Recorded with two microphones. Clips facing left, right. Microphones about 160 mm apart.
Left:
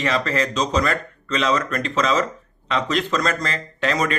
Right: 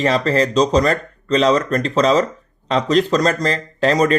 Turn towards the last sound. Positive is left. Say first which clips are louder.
# right 6 dB
turn(degrees=-35)  # may be behind; listen again after turning